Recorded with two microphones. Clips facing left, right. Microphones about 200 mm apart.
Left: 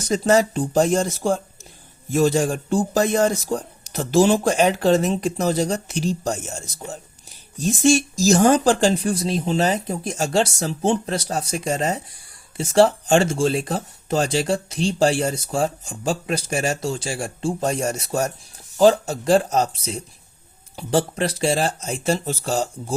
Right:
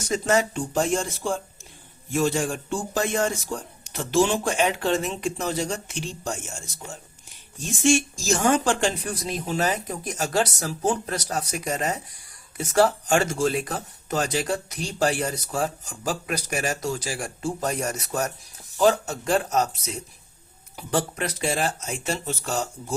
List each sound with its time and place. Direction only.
0.1 s a man's voice: 35° left (ahead or behind)